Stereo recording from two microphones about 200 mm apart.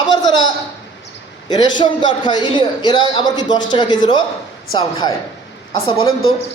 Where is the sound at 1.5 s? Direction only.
20° left (ahead or behind).